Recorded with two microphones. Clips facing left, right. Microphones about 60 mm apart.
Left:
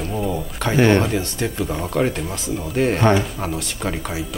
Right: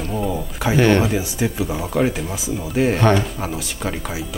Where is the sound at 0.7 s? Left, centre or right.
Left.